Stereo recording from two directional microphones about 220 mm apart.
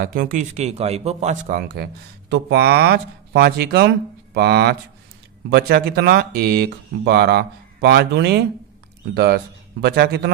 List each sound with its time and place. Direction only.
0.0 s a man's voice: 40° right (ahead or behind)